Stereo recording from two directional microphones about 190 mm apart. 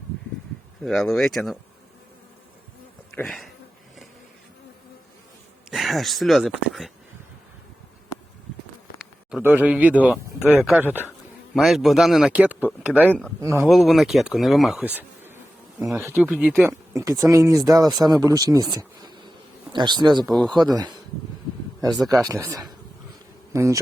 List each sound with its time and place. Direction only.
0.8 s speech: centre (ahead or behind)
3.2 s speech: centre (ahead or behind)
5.7 s speech: centre (ahead or behind)
9.3 s speech: 10° right (ahead or behind)
13.1 s speech: 5° left (ahead or behind)
13.4 s speech: 15° right (ahead or behind)
13.7 s speech: centre (ahead or behind); by 20.2 s 25° right (ahead or behind)
20.2 s speech: centre (ahead or behind)
22.3 s speech: 15° right (ahead or behind)